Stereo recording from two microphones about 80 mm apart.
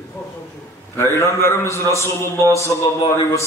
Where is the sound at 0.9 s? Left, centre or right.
Left.